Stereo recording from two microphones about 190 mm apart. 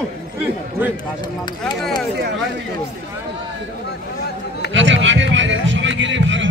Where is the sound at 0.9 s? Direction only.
20° left (ahead or behind).